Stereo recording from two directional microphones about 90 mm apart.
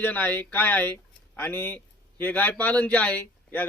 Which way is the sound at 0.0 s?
20° left (ahead or behind).